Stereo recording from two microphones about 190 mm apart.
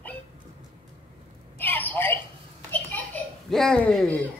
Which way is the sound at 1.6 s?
10° left (ahead or behind).